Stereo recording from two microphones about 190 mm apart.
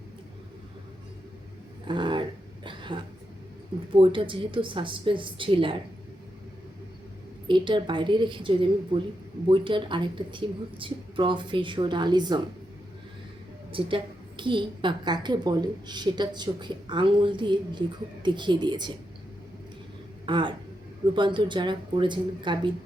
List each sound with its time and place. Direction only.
1.9 s a sound: 25° right (ahead or behind)
3.9 s a woman's voice: 25° right (ahead or behind)
7.4 s a woman's voice: 25° right (ahead or behind)
13.7 s a woman's voice: 25° right (ahead or behind)
20.2 s a woman's voice: 25° right (ahead or behind)